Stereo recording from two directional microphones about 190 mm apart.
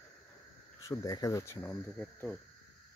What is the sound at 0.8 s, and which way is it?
Speech, 20° left (ahead or behind).